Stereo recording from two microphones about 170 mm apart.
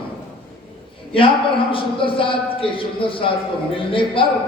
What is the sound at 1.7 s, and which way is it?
Speech, 30° left (ahead or behind).